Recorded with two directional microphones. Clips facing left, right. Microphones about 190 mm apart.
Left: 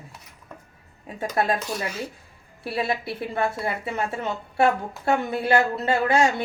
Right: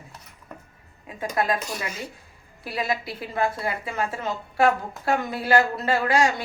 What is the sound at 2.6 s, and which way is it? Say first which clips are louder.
A woman's voice: left 1 dB; 30° left (ahead or behind).